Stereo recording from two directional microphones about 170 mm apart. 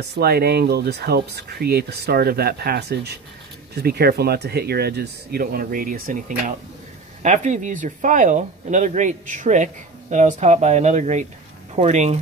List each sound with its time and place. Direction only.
0.1 s speech: 65° right (ahead or behind); by 12.2 s 40° right (ahead or behind)